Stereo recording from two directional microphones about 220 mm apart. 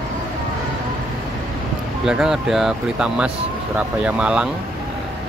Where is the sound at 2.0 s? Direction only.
5° right (ahead or behind).